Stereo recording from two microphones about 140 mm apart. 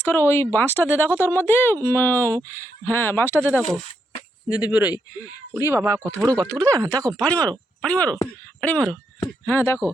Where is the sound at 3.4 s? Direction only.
15° right (ahead or behind).